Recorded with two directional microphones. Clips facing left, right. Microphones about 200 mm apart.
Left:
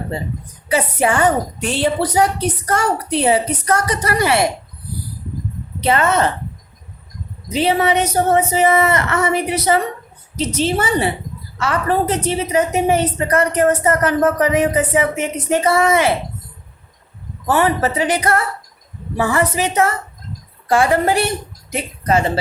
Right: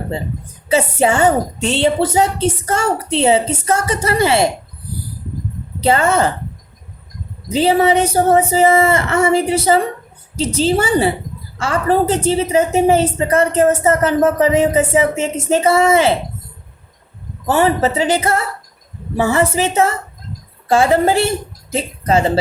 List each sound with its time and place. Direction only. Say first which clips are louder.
0.7 s a woman's voice: right 3 dB; 25° right (ahead or behind)
5.8 s a woman's voice: right 2 dB; 30° right (ahead or behind)
7.4 s a woman's voice: right 3 dB; 30° right (ahead or behind)
17.4 s a woman's voice: right 2 dB; 25° right (ahead or behind)